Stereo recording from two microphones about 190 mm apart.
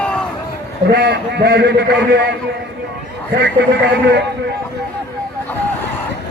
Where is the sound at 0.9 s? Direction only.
55° right (ahead or behind).